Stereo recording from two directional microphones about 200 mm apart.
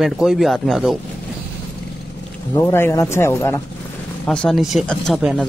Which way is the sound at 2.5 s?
10° left (ahead or behind).